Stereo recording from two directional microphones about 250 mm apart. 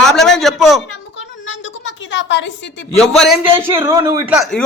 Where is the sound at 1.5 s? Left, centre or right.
Left.